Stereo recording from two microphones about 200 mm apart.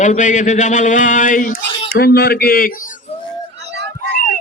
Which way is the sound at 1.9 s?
50° left (ahead or behind).